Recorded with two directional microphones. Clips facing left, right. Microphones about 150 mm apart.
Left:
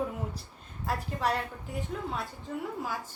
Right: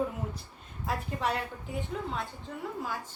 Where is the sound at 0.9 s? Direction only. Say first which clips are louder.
Left 1 dB; centre (ahead or behind).